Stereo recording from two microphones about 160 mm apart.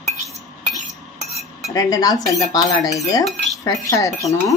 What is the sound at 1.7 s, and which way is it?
A woman's voice, 20° left (ahead or behind).